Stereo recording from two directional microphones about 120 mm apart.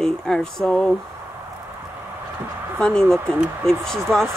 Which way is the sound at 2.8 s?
5° left (ahead or behind).